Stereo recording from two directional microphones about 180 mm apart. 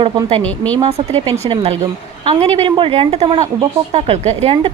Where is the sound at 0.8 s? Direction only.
35° right (ahead or behind).